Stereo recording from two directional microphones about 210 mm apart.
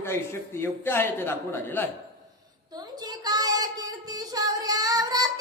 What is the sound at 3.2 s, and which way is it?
Child singing, 20° right (ahead or behind).